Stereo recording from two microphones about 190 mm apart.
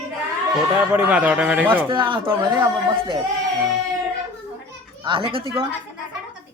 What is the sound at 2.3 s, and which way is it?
Speech, 10° right (ahead or behind).